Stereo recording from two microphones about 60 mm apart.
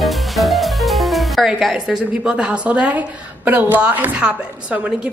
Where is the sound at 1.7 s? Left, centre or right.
Centre.